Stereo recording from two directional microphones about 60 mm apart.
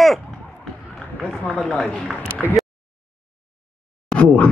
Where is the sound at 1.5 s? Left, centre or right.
Centre.